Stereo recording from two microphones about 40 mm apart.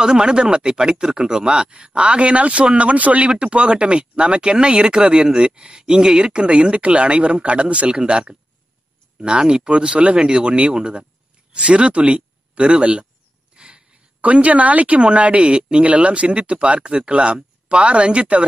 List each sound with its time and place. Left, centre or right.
0.0 s speech: right
9.2 s speech: right
13.6 s a sound: right
14.2 s speech: right